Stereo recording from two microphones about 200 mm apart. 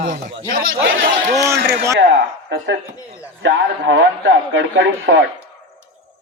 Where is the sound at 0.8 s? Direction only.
65° right (ahead or behind).